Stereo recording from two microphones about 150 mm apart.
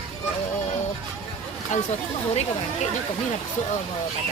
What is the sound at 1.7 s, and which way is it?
Speech, 50° left (ahead or behind).